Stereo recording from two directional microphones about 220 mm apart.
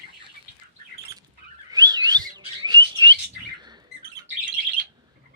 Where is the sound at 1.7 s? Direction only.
15° right (ahead or behind).